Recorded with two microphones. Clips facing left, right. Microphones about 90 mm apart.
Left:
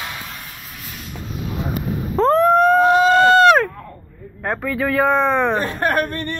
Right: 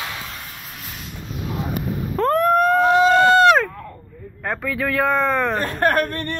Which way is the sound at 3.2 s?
15° right (ahead or behind).